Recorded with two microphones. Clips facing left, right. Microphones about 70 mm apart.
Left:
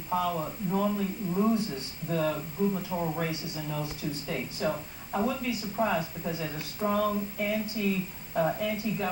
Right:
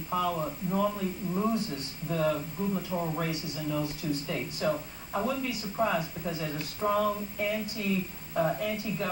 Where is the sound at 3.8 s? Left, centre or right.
Centre.